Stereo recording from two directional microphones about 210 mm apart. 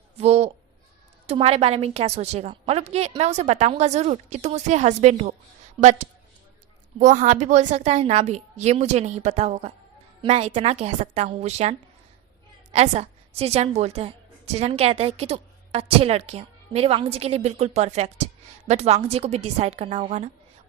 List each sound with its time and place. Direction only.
0.2 s a woman's voice: 30° right (ahead or behind)